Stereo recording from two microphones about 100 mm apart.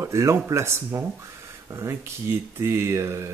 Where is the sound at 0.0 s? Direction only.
30° right (ahead or behind).